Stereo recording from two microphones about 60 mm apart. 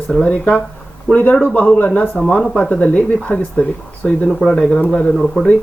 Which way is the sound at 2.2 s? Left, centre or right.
Centre.